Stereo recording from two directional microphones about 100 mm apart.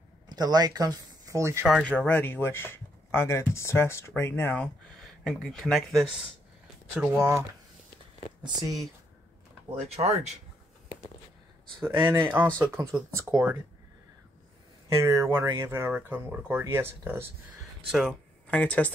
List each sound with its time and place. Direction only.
0.3 s speech: 45° right (ahead or behind)
1.7 s speech: 10° left (ahead or behind)
5.2 s speech: 10° left (ahead or behind)
8.5 s speech: 40° right (ahead or behind)
9.9 s speech: 90° right
11.8 s speech: 25° right (ahead or behind)
12.9 s speech: 10° right (ahead or behind)
15.0 s speech: 30° right (ahead or behind)
17.8 s speech: 5° right (ahead or behind)
18.5 s speech: 15° left (ahead or behind)